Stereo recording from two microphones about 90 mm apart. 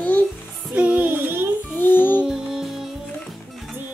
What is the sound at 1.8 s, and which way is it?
Music, 25° left (ahead or behind).